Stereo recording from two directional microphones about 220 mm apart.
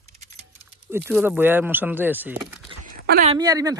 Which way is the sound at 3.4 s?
15° right (ahead or behind).